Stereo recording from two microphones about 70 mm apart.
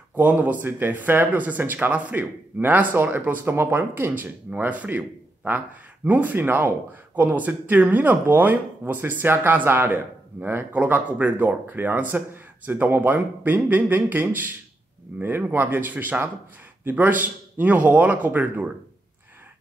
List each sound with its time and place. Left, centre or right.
0.1 s speech: right